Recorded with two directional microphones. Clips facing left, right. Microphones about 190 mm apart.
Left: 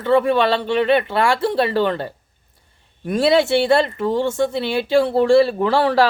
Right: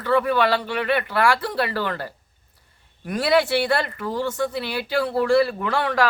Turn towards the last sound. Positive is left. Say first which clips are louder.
# left 6 dB
turn(degrees=30)  # may be behind; listen again after turning